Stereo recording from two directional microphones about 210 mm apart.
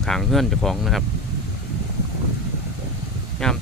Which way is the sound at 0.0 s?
Centre (ahead or behind).